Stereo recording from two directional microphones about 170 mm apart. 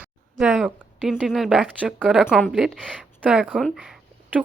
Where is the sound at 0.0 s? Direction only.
5° right (ahead or behind).